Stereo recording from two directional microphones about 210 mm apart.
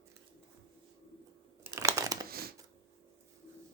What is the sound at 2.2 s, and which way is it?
Shuffling cards, 45° right (ahead or behind).